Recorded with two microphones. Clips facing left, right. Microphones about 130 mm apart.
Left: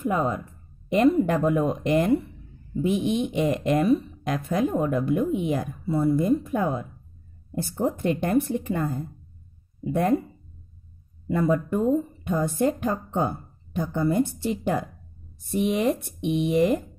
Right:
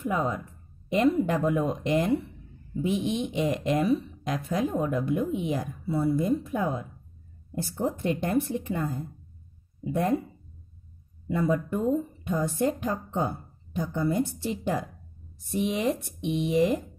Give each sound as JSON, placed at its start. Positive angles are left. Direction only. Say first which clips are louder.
{"t": 0.0, "sound": "speech", "louder": "left 3 dB", "side_deg": 60}
{"t": 11.2, "sound": "speech", "louder": "left 3 dB", "side_deg": 55}